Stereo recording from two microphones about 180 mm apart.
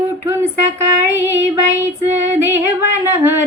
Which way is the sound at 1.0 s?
15° right (ahead or behind).